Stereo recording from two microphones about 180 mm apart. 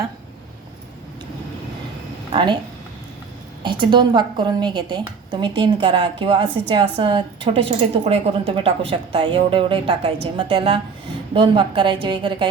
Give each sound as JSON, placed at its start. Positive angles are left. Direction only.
{"t": 2.3, "sound": "a woman's voice", "side_deg": -25}
{"t": 3.6, "sound": "a woman's voice", "side_deg": -25}